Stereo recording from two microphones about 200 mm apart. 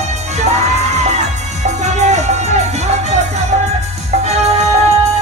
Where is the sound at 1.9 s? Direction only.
35° right (ahead or behind).